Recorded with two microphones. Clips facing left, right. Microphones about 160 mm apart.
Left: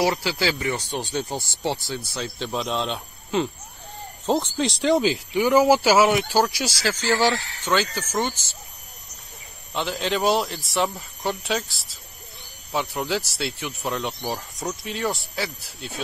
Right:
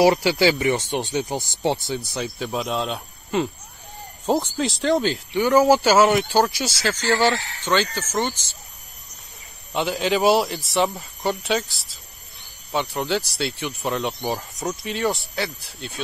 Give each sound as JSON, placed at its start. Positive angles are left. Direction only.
{"t": 0.0, "sound": "speech", "side_deg": -20}
{"t": 9.8, "sound": "speech", "side_deg": -5}